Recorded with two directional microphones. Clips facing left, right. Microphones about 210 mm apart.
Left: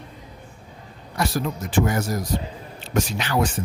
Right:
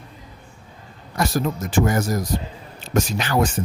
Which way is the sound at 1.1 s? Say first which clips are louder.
Right 3 dB; 45° right (ahead or behind).